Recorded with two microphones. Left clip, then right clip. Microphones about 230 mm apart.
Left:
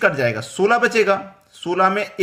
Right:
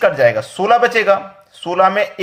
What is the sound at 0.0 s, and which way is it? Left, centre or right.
Speech, centre.